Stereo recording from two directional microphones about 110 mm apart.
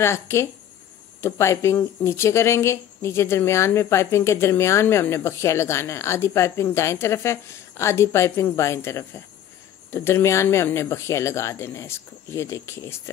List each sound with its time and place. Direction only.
0.0 s speech: 25° left (ahead or behind)